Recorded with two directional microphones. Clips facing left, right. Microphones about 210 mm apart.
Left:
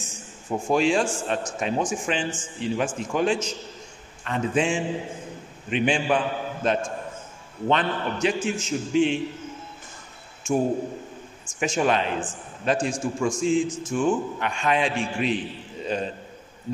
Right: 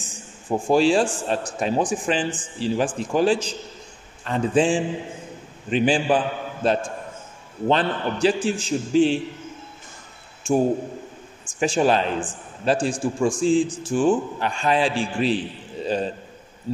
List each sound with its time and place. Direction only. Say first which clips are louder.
0.0 s a man's voice: even; 35° right (ahead or behind)
10.4 s a man's voice: right 3 dB; 30° right (ahead or behind)